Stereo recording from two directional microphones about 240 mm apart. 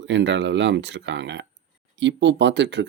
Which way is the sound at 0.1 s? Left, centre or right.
Right.